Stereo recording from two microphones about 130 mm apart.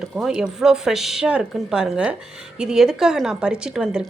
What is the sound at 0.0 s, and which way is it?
Speech, 5° right (ahead or behind).